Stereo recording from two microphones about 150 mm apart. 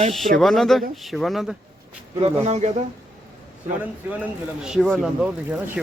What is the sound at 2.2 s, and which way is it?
Speech, 45° right (ahead or behind).